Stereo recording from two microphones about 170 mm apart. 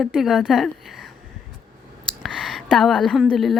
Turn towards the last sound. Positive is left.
turn(degrees=0)  # may be behind; listen again after turning